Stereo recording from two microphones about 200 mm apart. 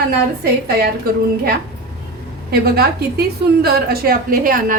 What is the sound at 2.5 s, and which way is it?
A woman's voice, 50° right (ahead or behind).